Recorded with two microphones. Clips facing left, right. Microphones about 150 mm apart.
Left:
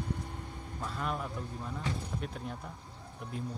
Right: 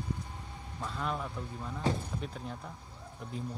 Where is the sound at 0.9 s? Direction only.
5° left (ahead or behind).